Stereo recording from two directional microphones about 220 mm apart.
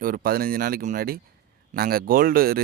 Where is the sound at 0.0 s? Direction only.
40° right (ahead or behind).